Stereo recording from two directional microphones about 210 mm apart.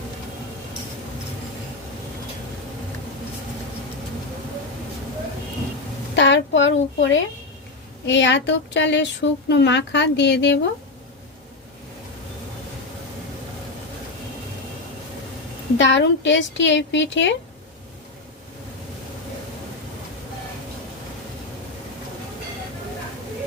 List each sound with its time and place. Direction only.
6.1 s speech: 60° left (ahead or behind)
15.8 s speech: 60° left (ahead or behind)